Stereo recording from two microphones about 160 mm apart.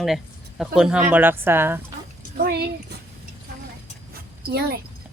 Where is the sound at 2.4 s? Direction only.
90° right.